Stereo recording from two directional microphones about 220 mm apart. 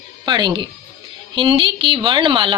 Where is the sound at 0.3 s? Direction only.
20° right (ahead or behind).